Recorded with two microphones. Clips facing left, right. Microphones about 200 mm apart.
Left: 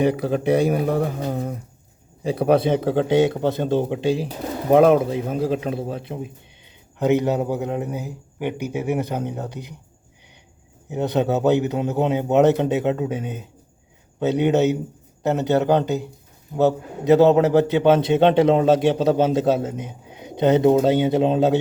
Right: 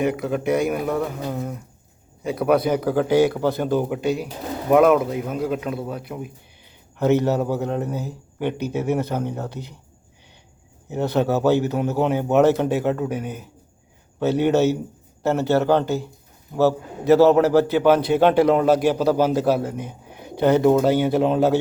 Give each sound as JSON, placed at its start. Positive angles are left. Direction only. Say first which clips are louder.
{"t": 0.0, "sound": "a man's voice", "louder": "left 2 dB", "side_deg": 30}
{"t": 7.0, "sound": "a man's voice", "louder": "even", "side_deg": 15}
{"t": 10.8, "sound": "a man's voice", "louder": "even", "side_deg": 15}